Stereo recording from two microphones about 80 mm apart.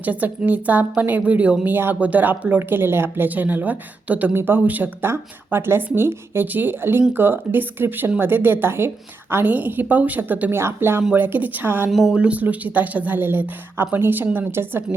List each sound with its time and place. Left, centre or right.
0.0 s speech: right
10.5 s speech: right
11.9 s speech: centre
12.2 s speech: centre